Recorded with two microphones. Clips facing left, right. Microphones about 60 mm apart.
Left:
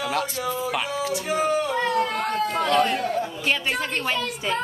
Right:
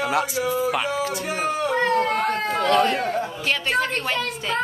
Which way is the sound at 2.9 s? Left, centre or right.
Right.